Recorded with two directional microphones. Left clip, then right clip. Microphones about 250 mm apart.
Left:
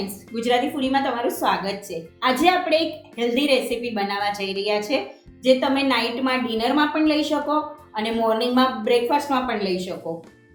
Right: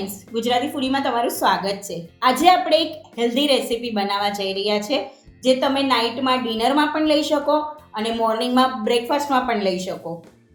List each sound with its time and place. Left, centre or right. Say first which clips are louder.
0.3 s a woman's voice: even; right